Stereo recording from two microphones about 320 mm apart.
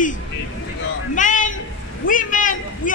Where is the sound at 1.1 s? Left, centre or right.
Left.